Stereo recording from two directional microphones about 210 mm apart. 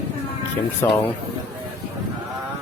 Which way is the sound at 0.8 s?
10° left (ahead or behind).